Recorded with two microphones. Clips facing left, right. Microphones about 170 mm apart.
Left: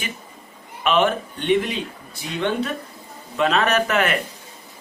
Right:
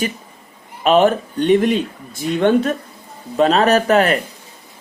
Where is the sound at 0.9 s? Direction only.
40° right (ahead or behind).